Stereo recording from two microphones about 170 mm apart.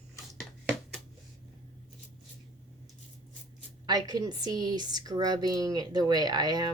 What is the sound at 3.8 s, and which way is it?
A woman's voice, 25° right (ahead or behind).